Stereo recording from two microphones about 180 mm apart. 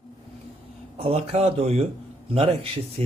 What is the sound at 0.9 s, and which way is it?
Speech, 35° right (ahead or behind).